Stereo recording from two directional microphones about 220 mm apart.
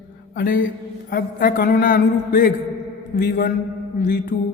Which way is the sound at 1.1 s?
40° left (ahead or behind).